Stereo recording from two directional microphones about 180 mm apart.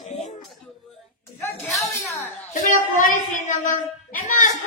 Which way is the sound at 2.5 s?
45° left (ahead or behind).